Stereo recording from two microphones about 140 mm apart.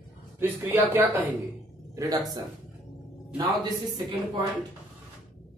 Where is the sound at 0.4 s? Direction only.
15° right (ahead or behind).